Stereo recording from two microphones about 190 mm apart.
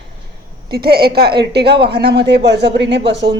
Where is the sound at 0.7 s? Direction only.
55° right (ahead or behind).